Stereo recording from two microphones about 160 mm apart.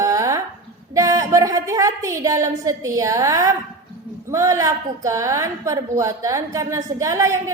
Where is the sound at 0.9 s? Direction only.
20° right (ahead or behind).